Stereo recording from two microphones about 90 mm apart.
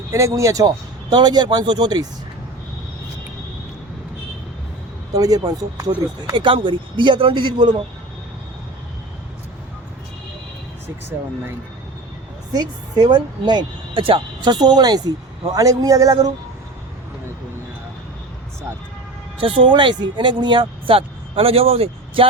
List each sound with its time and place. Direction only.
0.1 s speech: 35° right (ahead or behind)
1.1 s a woman's voice: 50° right (ahead or behind)
5.1 s a woman's voice: 40° right (ahead or behind)
6.3 s speech: 70° right (ahead or behind)
12.5 s a woman's voice: 50° right (ahead or behind)
19.4 s speech: 75° right (ahead or behind); by 22.3 s 90° right